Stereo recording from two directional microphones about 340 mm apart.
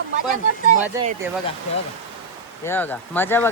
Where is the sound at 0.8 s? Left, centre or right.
Centre.